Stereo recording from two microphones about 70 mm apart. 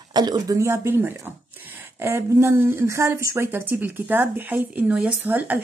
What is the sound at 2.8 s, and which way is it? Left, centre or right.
Speech, right.